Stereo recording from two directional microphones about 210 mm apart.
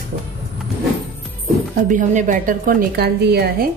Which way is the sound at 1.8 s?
40° right (ahead or behind).